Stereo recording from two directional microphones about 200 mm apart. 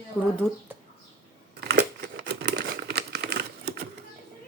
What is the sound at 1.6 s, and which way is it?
Crumpling, 55° right (ahead or behind).